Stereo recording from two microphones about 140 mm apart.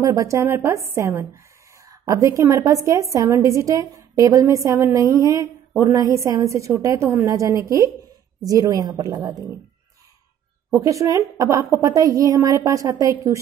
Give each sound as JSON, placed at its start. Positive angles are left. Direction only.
{"t": 0.0, "sound": "a woman's voice", "side_deg": -20}
{"t": 10.7, "sound": "a woman's voice", "side_deg": -25}